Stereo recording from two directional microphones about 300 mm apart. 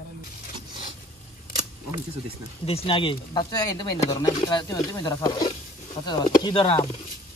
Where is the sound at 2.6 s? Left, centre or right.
Centre.